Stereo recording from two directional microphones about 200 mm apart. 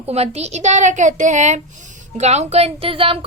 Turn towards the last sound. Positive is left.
turn(degrees=-25)  # may be behind; listen again after turning